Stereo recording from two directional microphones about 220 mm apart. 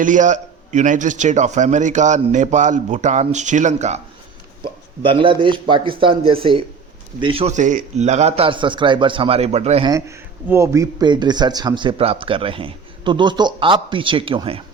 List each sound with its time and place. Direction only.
0.0 s a man's voice: 35° right (ahead or behind)
5.0 s a man's voice: 20° right (ahead or behind)
10.4 s a man's voice: 10° right (ahead or behind)